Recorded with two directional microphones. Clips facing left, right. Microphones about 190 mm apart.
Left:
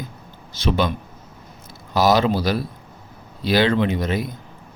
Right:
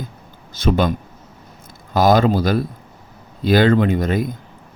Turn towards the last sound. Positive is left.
turn(degrees=-50)  # may be behind; listen again after turning